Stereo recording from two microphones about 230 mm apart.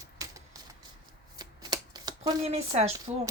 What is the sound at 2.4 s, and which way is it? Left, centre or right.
Female singing, right.